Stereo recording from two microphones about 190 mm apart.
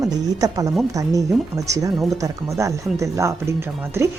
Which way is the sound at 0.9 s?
15° right (ahead or behind).